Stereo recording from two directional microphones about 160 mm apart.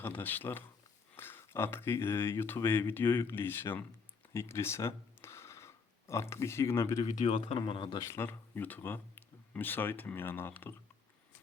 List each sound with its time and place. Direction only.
0.0 s speech: 10° left (ahead or behind)
7.0 s speech: 40° left (ahead or behind)
8.1 s speech: 15° left (ahead or behind)